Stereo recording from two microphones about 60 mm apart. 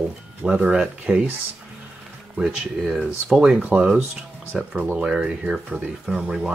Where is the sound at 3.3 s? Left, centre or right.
Centre.